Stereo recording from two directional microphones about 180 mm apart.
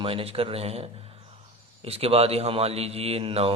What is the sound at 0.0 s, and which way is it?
Speech, 30° right (ahead or behind).